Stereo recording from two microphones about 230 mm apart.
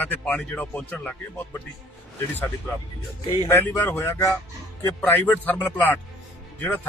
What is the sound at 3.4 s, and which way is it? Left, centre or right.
Speech, centre.